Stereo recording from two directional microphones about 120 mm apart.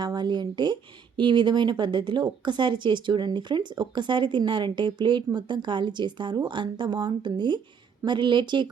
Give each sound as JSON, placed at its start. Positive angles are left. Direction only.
{"t": 0.0, "sound": "speech", "side_deg": -35}